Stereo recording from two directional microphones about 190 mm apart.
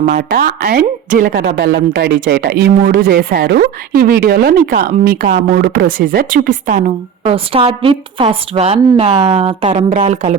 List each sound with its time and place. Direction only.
0.0 s speech: 45° right (ahead or behind)
7.3 s a woman's voice: 30° right (ahead or behind)